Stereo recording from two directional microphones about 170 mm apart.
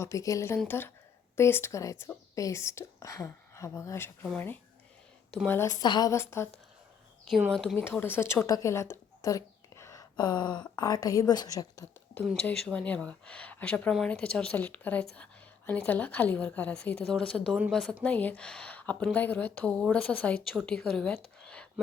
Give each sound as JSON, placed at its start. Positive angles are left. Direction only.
{"t": 0.0, "sound": "a woman's voice", "side_deg": 20}
{"t": 7.3, "sound": "speech", "side_deg": 0}
{"t": 12.5, "sound": "a woman's voice", "side_deg": 5}
{"t": 18.1, "sound": "speech", "side_deg": 10}